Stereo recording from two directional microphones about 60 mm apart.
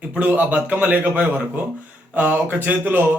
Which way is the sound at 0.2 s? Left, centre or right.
Right.